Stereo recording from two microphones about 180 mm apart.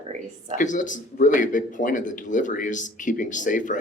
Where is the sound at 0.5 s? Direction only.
45° left (ahead or behind).